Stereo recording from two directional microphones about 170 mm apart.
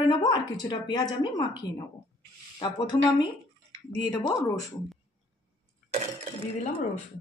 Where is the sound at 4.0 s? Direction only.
25° left (ahead or behind).